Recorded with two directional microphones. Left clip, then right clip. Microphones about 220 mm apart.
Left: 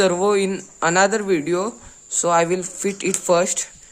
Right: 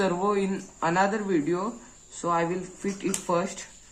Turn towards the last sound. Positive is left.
turn(degrees=50)  # may be behind; listen again after turning